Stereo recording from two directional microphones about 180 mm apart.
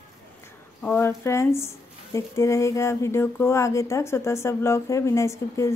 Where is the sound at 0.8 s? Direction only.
10° left (ahead or behind).